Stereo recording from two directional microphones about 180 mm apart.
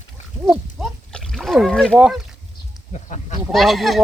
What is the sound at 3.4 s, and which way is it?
Speech, centre (ahead or behind).